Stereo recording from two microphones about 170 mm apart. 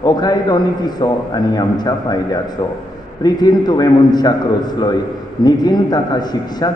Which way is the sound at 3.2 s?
25° left (ahead or behind).